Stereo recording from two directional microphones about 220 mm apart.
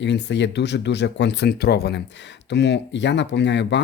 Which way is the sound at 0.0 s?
55° left (ahead or behind).